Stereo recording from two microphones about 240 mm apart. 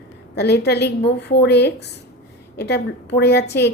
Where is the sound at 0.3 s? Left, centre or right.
Left.